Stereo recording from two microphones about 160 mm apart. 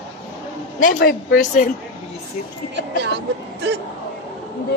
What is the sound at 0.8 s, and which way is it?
Speech, 65° left (ahead or behind).